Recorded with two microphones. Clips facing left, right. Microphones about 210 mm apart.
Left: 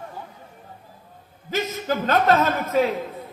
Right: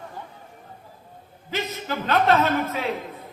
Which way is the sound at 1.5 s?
45° left (ahead or behind).